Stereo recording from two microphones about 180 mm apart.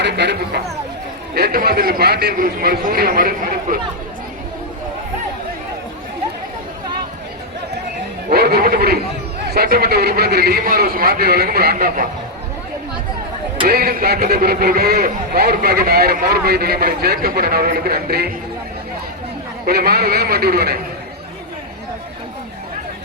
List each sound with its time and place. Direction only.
0.0 s speech: 70° right (ahead or behind); by 3.8 s 55° right (ahead or behind)
8.3 s speech: 60° right (ahead or behind)
13.7 s speech: 60° right (ahead or behind)
19.6 s speech: 60° right (ahead or behind)